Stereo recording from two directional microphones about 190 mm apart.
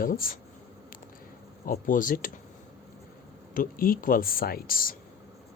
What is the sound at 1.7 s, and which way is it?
Speech, 45° left (ahead or behind).